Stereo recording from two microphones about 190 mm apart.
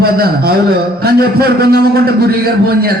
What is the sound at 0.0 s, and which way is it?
A man's voice, 55° right (ahead or behind).